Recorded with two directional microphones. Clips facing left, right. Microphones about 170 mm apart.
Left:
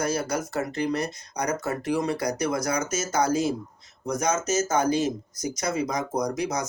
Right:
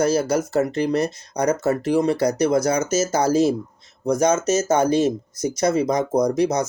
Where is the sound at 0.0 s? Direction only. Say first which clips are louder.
Right 8 dB; 25° right (ahead or behind).